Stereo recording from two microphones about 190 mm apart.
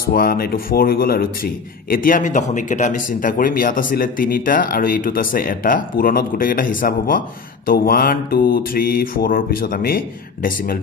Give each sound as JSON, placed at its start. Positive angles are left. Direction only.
{"t": 0.1, "sound": "a man's voice", "side_deg": 50}